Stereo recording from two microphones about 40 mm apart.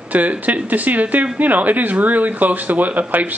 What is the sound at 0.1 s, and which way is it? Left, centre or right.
Speech, right.